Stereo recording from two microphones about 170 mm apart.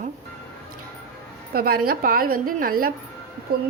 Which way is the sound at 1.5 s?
60° right (ahead or behind).